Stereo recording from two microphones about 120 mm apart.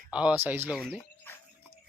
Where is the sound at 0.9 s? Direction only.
20° left (ahead or behind).